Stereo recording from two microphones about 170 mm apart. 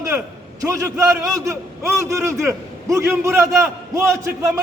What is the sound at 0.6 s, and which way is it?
A man's voice, 20° right (ahead or behind).